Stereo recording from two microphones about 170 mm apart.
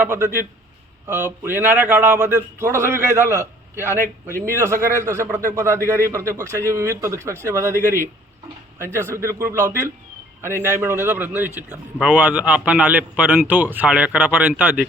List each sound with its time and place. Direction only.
0.0 s a man's voice: 15° right (ahead or behind)
4.4 s a man's voice: 15° right (ahead or behind)
8.8 s a man's voice: 15° right (ahead or behind)